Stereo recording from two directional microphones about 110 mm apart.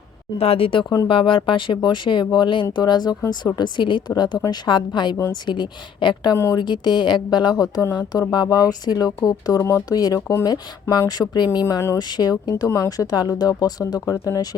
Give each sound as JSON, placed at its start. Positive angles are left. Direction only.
{"t": 0.3, "sound": "speech", "side_deg": 65}
{"t": 6.3, "sound": "speech", "side_deg": 25}
{"t": 6.6, "sound": "speech", "side_deg": 45}